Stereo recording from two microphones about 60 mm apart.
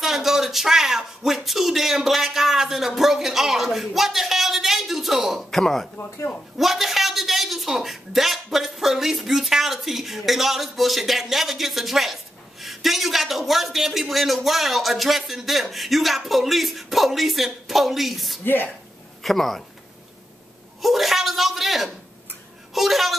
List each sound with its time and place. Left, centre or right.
0.0 s a man's voice: centre
18.4 s speech: left
19.2 s a man's voice: centre
20.8 s a man's voice: centre